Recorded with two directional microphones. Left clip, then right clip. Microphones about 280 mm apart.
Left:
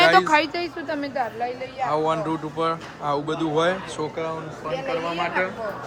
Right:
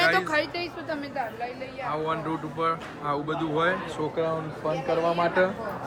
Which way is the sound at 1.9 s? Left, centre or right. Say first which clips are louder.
Left 5 dB; centre.